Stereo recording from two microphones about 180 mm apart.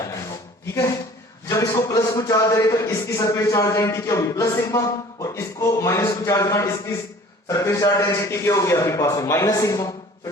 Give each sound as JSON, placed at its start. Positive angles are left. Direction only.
{"t": 0.7, "sound": "a man's voice", "side_deg": 15}